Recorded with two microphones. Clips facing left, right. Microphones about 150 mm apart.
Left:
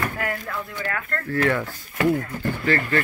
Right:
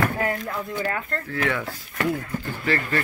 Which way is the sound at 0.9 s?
25° right (ahead or behind).